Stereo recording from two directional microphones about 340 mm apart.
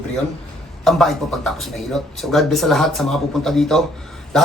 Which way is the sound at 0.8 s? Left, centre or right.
Centre.